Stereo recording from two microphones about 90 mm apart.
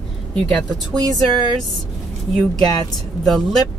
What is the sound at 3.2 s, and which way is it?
Speech, centre (ahead or behind).